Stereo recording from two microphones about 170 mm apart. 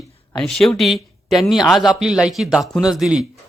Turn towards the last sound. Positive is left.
turn(degrees=-5)  # may be behind; listen again after turning